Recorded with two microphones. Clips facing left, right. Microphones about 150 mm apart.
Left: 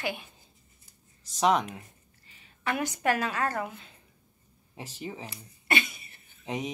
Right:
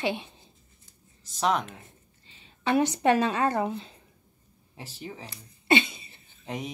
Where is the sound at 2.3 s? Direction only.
25° right (ahead or behind).